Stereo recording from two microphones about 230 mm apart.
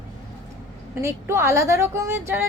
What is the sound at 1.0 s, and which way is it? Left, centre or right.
Speech, centre.